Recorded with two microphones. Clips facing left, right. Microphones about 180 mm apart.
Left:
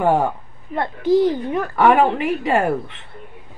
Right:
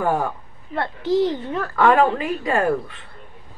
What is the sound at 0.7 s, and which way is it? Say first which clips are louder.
A woman's voice: left 3 dB; 15° left (ahead or behind).